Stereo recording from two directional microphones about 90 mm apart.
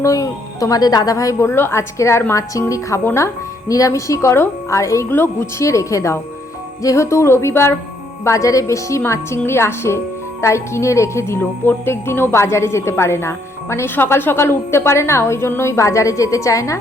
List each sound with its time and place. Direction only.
0.0 s a woman's voice: 40° left (ahead or behind)